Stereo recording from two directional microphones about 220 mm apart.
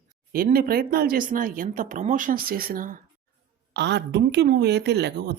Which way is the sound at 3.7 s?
50° right (ahead or behind).